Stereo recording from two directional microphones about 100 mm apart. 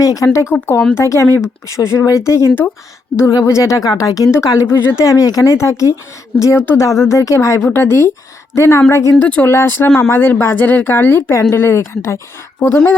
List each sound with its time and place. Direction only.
0.0 s speech: 35° left (ahead or behind)
0.5 s a woman's voice: 20° left (ahead or behind)
9.2 s a woman's voice: 15° left (ahead or behind)